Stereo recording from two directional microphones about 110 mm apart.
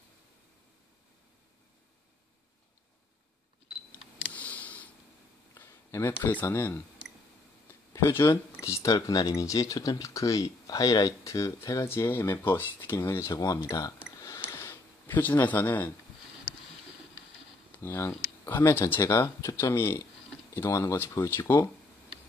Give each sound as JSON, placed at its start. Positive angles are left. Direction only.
{"t": 3.9, "sound": "camera", "side_deg": 15}
{"t": 5.5, "sound": "speech", "side_deg": 25}
{"t": 7.9, "sound": "speech", "side_deg": 25}
{"t": 14.5, "sound": "a sound", "side_deg": 25}
{"t": 17.8, "sound": "speech", "side_deg": 25}